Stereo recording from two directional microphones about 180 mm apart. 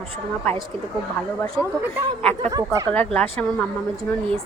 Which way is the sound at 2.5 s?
20° right (ahead or behind).